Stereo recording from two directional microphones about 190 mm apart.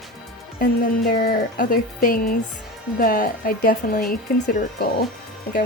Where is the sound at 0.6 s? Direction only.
50° left (ahead or behind).